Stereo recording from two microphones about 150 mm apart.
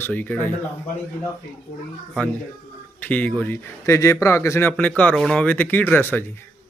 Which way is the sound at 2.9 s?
10° left (ahead or behind).